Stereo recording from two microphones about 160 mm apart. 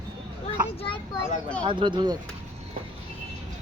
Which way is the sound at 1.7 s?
30° right (ahead or behind).